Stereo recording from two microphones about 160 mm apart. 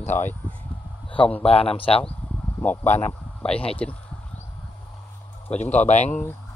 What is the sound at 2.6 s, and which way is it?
Speech, 10° left (ahead or behind).